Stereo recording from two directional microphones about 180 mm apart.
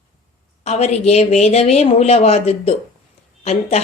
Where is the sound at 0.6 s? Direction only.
35° left (ahead or behind).